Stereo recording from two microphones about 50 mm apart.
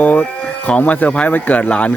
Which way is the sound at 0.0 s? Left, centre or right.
Left.